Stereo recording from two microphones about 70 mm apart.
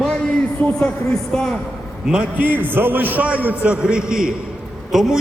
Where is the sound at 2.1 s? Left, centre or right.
Centre.